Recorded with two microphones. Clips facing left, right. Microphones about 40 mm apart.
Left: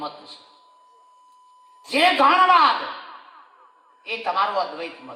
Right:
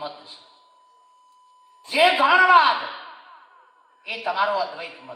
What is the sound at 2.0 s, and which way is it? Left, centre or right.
Speech, left.